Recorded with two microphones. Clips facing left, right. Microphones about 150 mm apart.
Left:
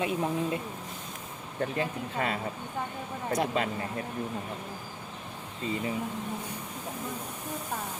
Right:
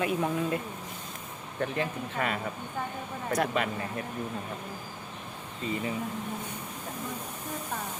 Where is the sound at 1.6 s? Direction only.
25° left (ahead or behind).